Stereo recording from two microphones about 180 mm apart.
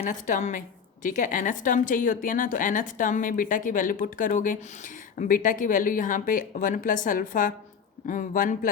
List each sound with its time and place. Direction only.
0.0 s a woman's voice: 45° left (ahead or behind)